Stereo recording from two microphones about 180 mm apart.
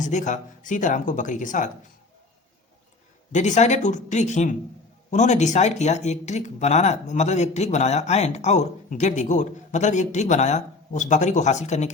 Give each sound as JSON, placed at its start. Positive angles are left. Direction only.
{"t": 0.0, "sound": "speech", "side_deg": 45}
{"t": 3.3, "sound": "speech", "side_deg": 40}